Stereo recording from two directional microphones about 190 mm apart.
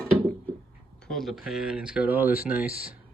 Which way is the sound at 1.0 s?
Centre (ahead or behind).